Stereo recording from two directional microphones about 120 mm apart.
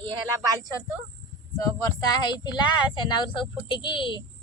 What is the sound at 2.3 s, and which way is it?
A child's voice, 40° left (ahead or behind).